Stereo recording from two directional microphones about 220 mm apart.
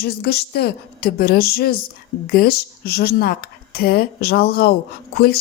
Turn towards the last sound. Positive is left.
turn(degrees=45)  # may be behind; listen again after turning